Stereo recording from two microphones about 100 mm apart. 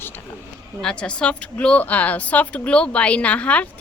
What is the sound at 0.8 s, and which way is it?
A woman's voice, 10° left (ahead or behind).